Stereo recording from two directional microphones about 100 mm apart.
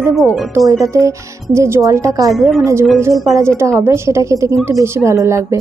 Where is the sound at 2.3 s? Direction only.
Centre (ahead or behind).